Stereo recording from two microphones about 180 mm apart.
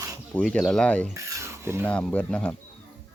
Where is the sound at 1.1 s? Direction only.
15° right (ahead or behind).